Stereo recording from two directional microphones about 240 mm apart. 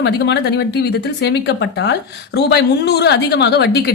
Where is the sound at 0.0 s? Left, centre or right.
Left.